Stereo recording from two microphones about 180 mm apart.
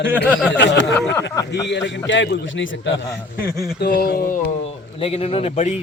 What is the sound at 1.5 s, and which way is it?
A man's voice, 80° left.